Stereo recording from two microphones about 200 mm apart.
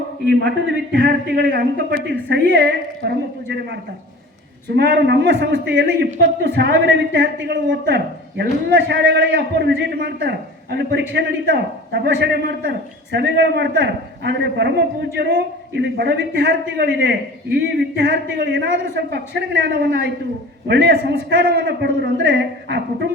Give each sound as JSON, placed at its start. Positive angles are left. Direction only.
{"t": 0.9, "sound": "a woman's voice", "side_deg": -50}